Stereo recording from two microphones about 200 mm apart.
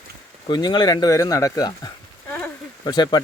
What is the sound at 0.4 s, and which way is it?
Speech, 20° left (ahead or behind).